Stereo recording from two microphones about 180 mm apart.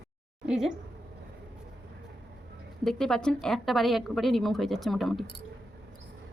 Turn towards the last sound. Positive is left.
turn(degrees=0)  # may be behind; listen again after turning